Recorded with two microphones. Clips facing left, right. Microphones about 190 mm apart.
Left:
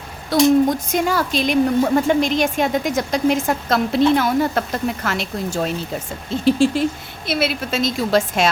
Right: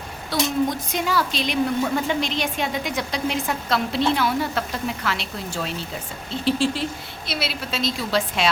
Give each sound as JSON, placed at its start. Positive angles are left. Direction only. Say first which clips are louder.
{"t": 0.3, "sound": "a woman's voice", "louder": "left 8 dB", "side_deg": 45}